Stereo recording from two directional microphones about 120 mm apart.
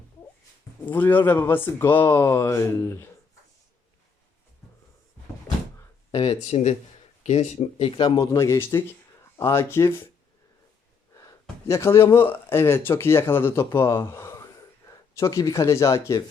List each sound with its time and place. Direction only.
0.9 s speech: 15° left (ahead or behind)
6.1 s speech: 55° left (ahead or behind)
8.1 s speech: 30° left (ahead or behind)
11.1 s speech: 30° left (ahead or behind)